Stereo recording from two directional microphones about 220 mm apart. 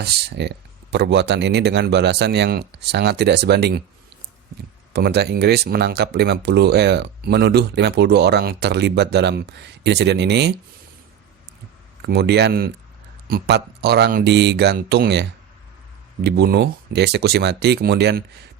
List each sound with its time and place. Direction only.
0.0 s speech: 50° right (ahead or behind)
4.9 s speech: 45° right (ahead or behind)
12.0 s speech: 45° right (ahead or behind)